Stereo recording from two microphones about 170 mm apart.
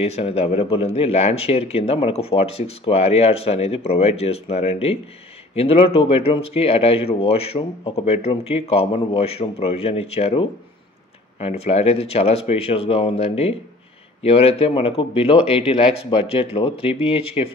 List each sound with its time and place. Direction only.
0.0 s speech: 35° left (ahead or behind)